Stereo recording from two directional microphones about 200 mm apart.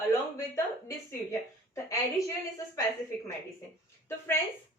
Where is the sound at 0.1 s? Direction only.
15° left (ahead or behind).